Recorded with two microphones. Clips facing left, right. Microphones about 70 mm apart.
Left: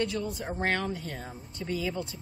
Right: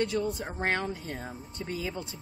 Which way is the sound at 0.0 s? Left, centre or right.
Right.